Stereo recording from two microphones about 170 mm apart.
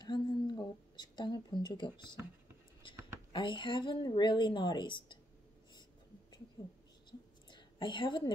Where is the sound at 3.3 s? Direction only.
30° left (ahead or behind).